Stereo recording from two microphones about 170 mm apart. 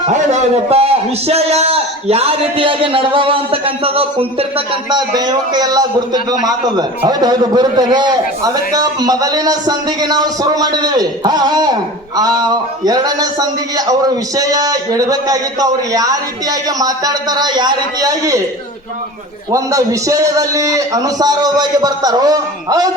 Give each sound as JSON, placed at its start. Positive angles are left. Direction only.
{"t": 0.0, "sound": "a man's voice", "side_deg": -40}
{"t": 19.5, "sound": "a man's voice", "side_deg": -20}